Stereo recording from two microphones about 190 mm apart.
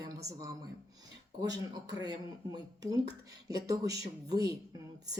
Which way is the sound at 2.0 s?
20° right (ahead or behind).